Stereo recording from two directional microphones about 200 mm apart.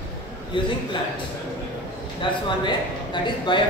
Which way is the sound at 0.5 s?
25° left (ahead or behind).